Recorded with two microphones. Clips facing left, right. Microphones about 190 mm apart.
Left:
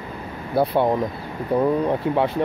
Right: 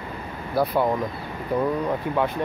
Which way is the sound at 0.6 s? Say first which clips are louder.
Left 3 dB; 25° left (ahead or behind).